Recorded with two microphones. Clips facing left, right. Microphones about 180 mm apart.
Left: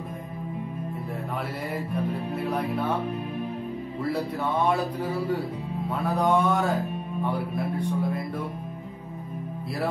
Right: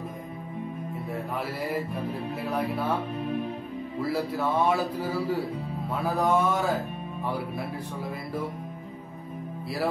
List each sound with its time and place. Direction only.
2.5 s speech: centre (ahead or behind)
4.0 s speech: centre (ahead or behind)